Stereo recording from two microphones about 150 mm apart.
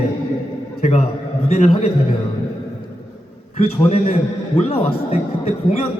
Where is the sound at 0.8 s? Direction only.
45° left (ahead or behind).